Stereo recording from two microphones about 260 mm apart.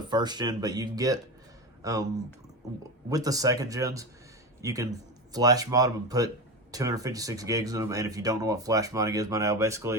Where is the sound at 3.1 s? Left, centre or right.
Centre.